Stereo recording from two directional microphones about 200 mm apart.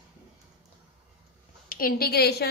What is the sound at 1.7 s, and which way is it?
Speech, 45° left (ahead or behind).